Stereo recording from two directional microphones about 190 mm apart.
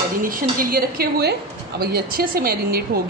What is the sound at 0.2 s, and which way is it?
A woman's voice, 50° right (ahead or behind).